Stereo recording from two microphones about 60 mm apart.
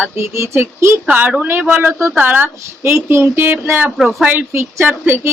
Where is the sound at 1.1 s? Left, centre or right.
Right.